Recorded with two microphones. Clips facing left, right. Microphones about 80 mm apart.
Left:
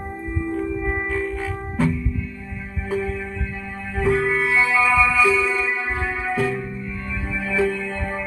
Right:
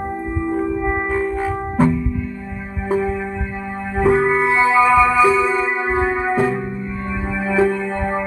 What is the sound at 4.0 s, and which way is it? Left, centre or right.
Music, right.